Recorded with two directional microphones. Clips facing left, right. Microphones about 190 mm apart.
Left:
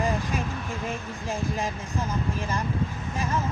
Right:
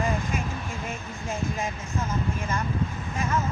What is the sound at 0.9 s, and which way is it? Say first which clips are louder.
Speech: left 2 dB; 35° left (ahead or behind).